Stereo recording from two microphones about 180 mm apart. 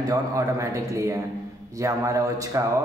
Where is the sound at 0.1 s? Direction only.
20° right (ahead or behind).